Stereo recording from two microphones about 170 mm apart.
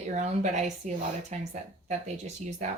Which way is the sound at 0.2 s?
45° right (ahead or behind).